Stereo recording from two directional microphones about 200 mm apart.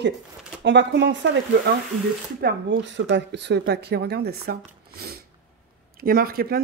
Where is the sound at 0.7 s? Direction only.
60° right (ahead or behind).